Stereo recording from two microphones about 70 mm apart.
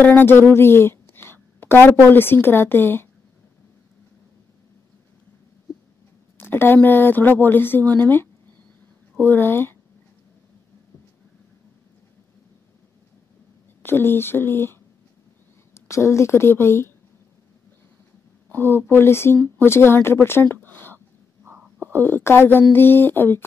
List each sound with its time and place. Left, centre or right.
0.0 s a woman's voice: left
6.3 s a woman's voice: left
13.8 s speech: left
15.7 s a woman's voice: left
18.5 s a woman's voice: left